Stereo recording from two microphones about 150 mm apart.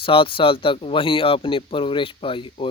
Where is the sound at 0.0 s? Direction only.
35° left (ahead or behind).